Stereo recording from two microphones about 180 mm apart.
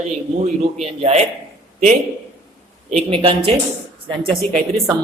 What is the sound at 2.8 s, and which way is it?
Speech, 35° right (ahead or behind).